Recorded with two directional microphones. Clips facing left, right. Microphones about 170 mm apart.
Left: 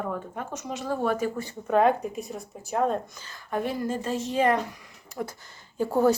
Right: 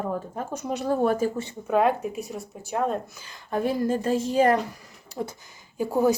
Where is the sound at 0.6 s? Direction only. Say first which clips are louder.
Right 5 dB; 45° right (ahead or behind).